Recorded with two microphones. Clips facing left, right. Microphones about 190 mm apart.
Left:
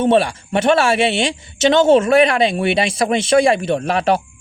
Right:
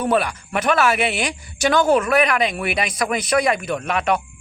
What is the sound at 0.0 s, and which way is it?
A man's voice, 30° left (ahead or behind).